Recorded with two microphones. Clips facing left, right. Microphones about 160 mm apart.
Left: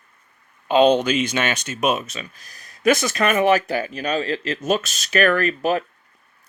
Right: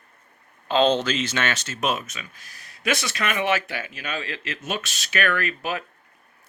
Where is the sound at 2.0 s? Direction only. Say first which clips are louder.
Left 5 dB; 30° left (ahead or behind).